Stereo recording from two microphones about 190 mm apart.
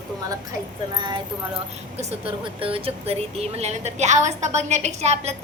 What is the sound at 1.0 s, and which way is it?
Speech, 25° right (ahead or behind).